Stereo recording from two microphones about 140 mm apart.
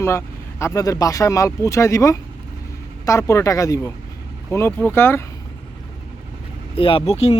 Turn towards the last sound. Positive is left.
turn(degrees=50)  # may be behind; listen again after turning